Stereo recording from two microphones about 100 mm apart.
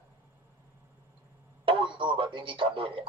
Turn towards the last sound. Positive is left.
turn(degrees=-60)  # may be behind; listen again after turning